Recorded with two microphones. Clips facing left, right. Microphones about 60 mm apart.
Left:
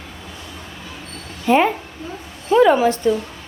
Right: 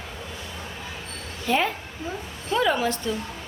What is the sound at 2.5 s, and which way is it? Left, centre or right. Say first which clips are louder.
Speech: left 10 dB; left.